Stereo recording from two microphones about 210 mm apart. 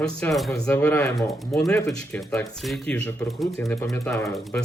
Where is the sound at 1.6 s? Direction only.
15° left (ahead or behind).